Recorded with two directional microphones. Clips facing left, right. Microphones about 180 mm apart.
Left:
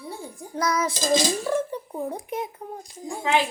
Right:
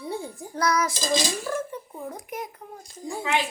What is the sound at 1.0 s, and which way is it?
Speech, 50° left (ahead or behind).